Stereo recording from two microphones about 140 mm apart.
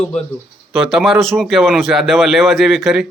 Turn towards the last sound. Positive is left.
turn(degrees=0)  # may be behind; listen again after turning